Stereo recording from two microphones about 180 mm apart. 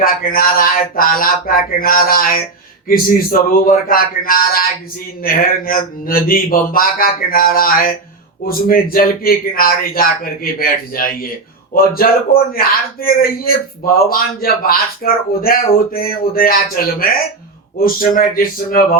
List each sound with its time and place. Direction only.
0.0 s a man's voice: 55° left (ahead or behind)